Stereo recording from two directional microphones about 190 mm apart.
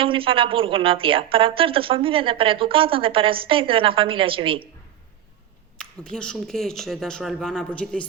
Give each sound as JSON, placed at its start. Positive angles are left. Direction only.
{"t": 0.0, "sound": "speech", "side_deg": -30}
{"t": 5.7, "sound": "speech", "side_deg": 5}